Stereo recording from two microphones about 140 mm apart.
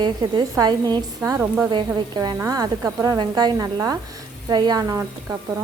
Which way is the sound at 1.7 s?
30° right (ahead or behind).